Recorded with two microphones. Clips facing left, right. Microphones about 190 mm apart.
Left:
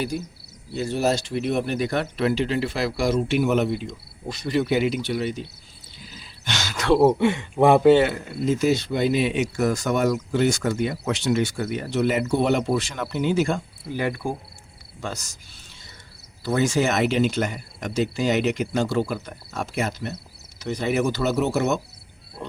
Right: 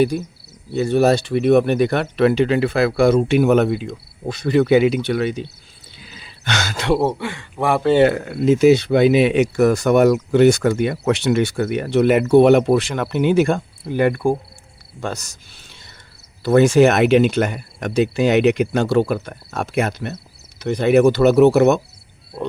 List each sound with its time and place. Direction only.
0.7 s speech: 60° right (ahead or behind)
6.8 s speech: 30° right (ahead or behind)
7.2 s a man's voice: 25° left (ahead or behind)
8.0 s speech: 65° right (ahead or behind)